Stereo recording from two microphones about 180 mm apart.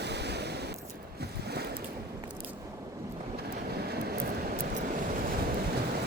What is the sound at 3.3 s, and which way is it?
Vehicle, 60° right (ahead or behind).